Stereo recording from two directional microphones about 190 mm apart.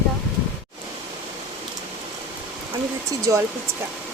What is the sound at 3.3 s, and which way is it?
Speech, 15° right (ahead or behind).